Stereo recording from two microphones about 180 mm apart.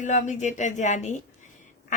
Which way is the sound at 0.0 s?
45° left (ahead or behind).